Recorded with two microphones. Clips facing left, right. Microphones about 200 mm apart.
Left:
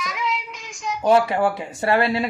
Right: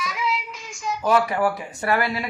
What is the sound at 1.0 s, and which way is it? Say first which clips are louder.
Speech: left 3 dB; 25° left (ahead or behind).